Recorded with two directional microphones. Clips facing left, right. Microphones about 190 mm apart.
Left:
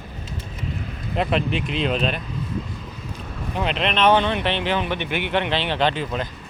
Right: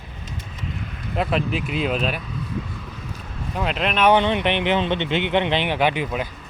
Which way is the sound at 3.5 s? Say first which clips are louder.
Even; 5° right (ahead or behind).